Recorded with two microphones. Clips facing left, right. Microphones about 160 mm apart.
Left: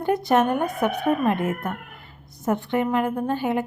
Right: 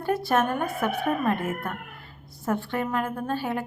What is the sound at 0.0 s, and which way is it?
A woman's voice, 20° left (ahead or behind).